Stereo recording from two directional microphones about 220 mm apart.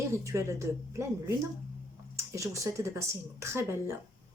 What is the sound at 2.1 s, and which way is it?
Speech, 15° right (ahead or behind).